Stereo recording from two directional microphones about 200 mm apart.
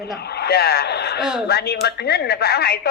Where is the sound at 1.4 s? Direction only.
55° left (ahead or behind).